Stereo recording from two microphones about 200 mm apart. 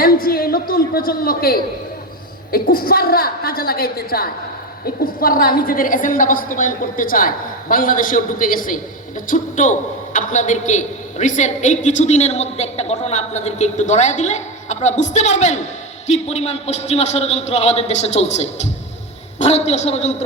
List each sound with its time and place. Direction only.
0.0 s a woman's voice: 50° left (ahead or behind)